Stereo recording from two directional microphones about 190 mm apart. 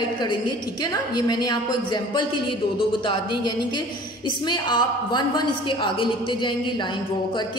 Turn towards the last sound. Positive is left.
turn(degrees=25)  # may be behind; listen again after turning